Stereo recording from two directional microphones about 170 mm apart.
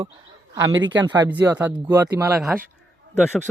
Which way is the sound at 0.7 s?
90° right.